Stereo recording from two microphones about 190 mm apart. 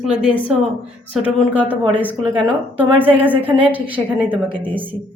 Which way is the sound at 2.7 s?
10° right (ahead or behind).